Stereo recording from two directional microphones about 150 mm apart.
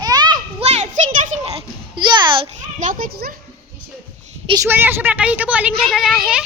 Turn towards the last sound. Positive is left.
turn(degrees=-5)  # may be behind; listen again after turning